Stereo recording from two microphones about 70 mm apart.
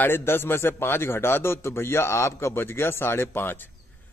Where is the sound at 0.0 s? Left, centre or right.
Left.